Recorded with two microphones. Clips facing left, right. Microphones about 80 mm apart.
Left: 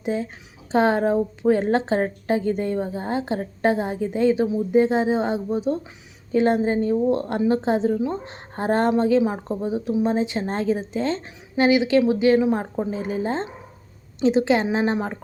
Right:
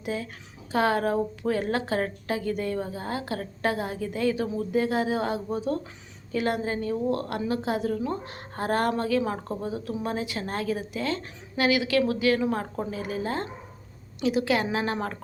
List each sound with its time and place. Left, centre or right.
0.0 s a woman's voice: left
12.9 s a woman's voice: left